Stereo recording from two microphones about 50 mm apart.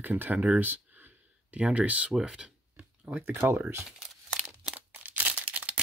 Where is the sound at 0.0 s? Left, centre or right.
Right.